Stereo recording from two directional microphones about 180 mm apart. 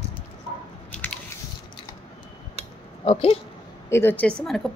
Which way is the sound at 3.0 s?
30° left (ahead or behind).